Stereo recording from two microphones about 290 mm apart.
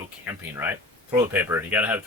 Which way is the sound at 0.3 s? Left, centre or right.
Centre.